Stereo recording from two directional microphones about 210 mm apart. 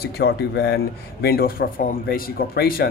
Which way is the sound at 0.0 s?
50° left (ahead or behind).